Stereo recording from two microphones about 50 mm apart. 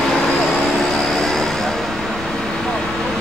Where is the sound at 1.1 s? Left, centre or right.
Centre.